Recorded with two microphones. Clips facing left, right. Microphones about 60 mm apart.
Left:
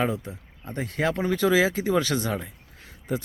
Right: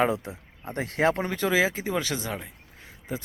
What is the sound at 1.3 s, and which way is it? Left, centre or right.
Speech, centre.